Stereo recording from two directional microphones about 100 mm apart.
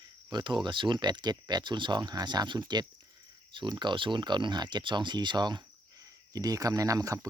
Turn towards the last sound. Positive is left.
turn(degrees=-35)  # may be behind; listen again after turning